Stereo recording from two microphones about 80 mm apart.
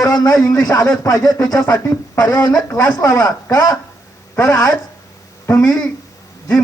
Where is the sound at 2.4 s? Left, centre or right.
Left.